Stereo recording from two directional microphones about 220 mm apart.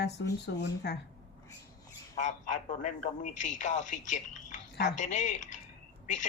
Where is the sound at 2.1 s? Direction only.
35° left (ahead or behind).